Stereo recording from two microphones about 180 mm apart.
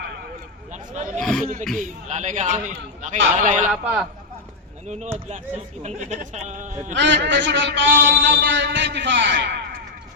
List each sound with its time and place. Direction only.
0.7 s a sound: 40° right (ahead or behind)
1.2 s a man's voice: 5° left (ahead or behind)
1.7 s a man's voice: 45° right (ahead or behind)
3.7 s a man's voice: 5° right (ahead or behind)
4.9 s speech: 40° right (ahead or behind)
6.9 s a man's voice: 80° right